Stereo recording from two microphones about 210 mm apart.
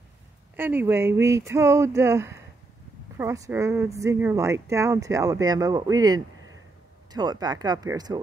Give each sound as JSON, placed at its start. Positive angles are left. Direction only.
{"t": 0.6, "sound": "speech", "side_deg": -10}